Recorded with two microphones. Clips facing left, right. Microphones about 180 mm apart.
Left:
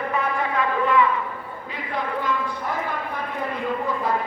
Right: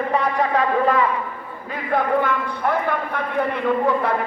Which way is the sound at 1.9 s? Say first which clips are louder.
Right 7 dB; 55° right (ahead or behind).